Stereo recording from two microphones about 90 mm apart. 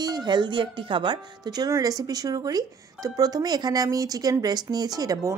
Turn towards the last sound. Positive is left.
turn(degrees=-40)  # may be behind; listen again after turning